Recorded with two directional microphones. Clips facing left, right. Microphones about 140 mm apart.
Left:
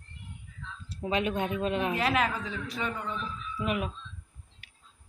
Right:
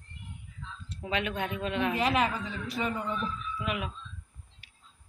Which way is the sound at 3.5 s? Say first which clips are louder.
Left 6 dB; 40° left (ahead or behind).